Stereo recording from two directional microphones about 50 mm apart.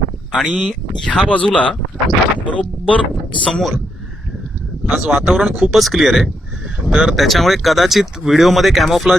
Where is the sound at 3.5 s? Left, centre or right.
Centre.